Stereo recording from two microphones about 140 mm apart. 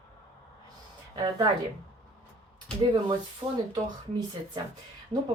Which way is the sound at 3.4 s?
25° right (ahead or behind).